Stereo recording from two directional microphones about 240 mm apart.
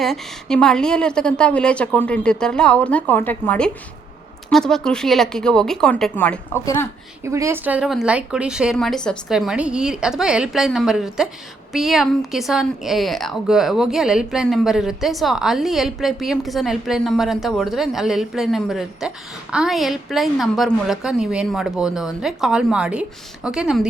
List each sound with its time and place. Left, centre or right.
0.0 s a woman's voice: centre
7.3 s a woman's voice: centre